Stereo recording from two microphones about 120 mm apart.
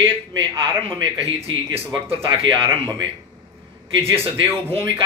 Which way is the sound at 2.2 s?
45° right (ahead or behind).